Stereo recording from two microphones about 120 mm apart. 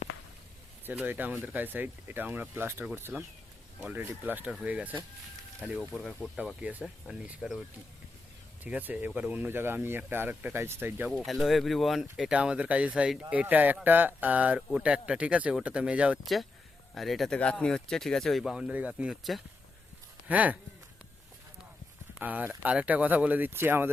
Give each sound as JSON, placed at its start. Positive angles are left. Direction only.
{"t": 0.9, "sound": "speech", "side_deg": -15}
{"t": 5.8, "sound": "speech", "side_deg": 5}
{"t": 6.6, "sound": "speech", "side_deg": -10}
{"t": 8.6, "sound": "speech", "side_deg": -15}
{"t": 11.3, "sound": "speech", "side_deg": 0}
{"t": 19.1, "sound": "speech", "side_deg": 0}
{"t": 20.2, "sound": "speech", "side_deg": -10}
{"t": 22.2, "sound": "speech", "side_deg": -15}